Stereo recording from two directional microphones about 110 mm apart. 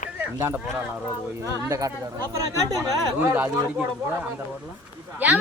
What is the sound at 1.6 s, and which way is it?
Speech, 25° right (ahead or behind).